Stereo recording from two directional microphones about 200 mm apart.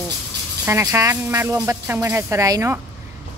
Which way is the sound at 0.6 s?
15° right (ahead or behind).